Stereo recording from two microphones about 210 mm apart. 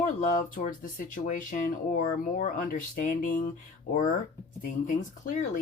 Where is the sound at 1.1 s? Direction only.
40° left (ahead or behind).